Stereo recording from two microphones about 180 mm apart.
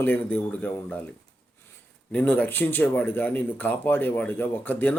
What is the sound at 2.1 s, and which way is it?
Speech, 10° left (ahead or behind).